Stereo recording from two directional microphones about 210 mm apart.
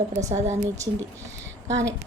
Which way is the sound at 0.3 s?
35° right (ahead or behind).